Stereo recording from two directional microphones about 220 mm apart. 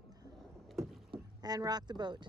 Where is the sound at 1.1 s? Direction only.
15° right (ahead or behind).